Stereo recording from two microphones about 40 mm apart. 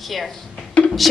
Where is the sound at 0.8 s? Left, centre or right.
Left.